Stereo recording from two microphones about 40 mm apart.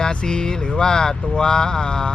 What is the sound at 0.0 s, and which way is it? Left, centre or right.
Speech, left.